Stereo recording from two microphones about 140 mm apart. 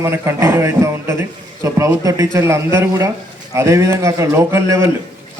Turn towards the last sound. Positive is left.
turn(degrees=-20)  # may be behind; listen again after turning